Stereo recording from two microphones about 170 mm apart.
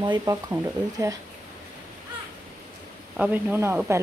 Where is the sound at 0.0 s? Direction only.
25° right (ahead or behind).